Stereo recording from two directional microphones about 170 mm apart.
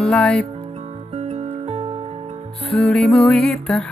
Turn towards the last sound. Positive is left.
turn(degrees=5)  # may be behind; listen again after turning